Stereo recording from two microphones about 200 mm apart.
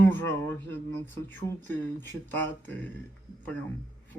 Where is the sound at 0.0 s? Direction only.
10° left (ahead or behind).